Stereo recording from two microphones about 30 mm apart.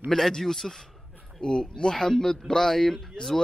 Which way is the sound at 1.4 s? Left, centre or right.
Left.